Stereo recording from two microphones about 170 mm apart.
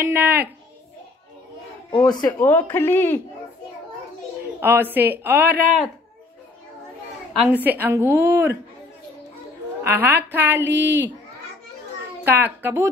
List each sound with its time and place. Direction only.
0.0 s a woman's voice: 10° right (ahead or behind)
1.9 s speech: 25° left (ahead or behind)
2.4 s a woman's voice: 10° left (ahead or behind)
4.6 s a woman's voice: 10° right (ahead or behind)
7.3 s a woman's voice: 10° right (ahead or behind)
9.8 s a woman's voice: 10° right (ahead or behind)
12.3 s a woman's voice: 10° right (ahead or behind)